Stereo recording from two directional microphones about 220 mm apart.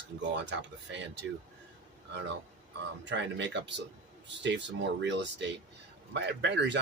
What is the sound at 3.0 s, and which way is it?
Speech, 55° right (ahead or behind).